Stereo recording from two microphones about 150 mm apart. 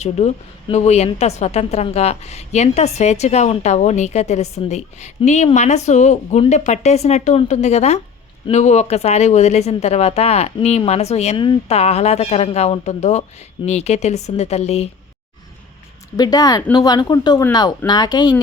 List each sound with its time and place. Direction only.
0.0 s a woman's voice: 45° left (ahead or behind)
16.1 s speech: 25° left (ahead or behind)